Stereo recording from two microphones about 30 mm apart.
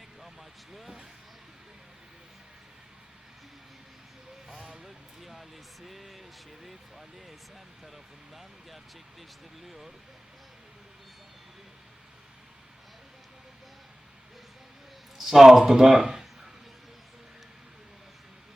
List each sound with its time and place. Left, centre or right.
0.7 s a sound: centre
4.4 s vehicle: centre
5.2 s speech: centre
9.6 s speech: centre
15.2 s speech: centre